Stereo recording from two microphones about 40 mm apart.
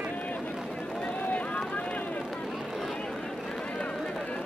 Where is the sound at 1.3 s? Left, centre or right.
Left.